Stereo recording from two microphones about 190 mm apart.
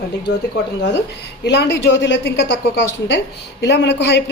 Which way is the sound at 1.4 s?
65° left (ahead or behind).